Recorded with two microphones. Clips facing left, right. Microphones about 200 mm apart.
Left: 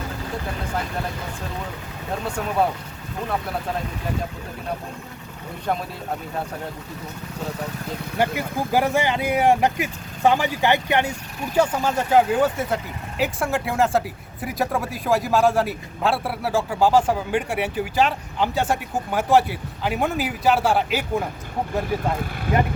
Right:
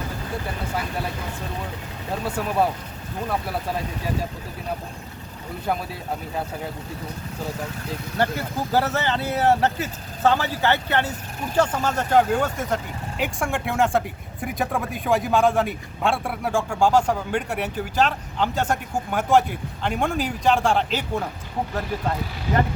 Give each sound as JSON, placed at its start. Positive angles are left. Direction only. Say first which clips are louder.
{"t": 2.2, "sound": "a man's voice", "louder": "even", "side_deg": -5}
{"t": 8.2, "sound": "a man's voice", "louder": "left 1 dB", "side_deg": 15}